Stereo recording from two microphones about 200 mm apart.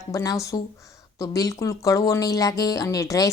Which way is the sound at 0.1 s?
15° left (ahead or behind).